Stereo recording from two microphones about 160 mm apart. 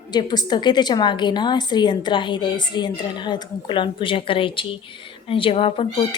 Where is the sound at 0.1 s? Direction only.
25° left (ahead or behind).